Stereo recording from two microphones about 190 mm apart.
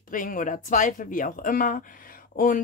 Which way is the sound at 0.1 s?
45° left (ahead or behind).